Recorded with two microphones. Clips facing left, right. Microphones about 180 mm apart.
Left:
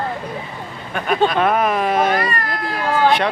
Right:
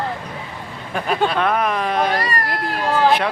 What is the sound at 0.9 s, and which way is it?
Speech, 30° right (ahead or behind).